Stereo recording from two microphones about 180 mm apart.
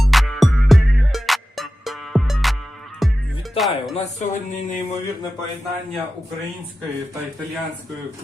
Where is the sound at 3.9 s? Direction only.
40° left (ahead or behind).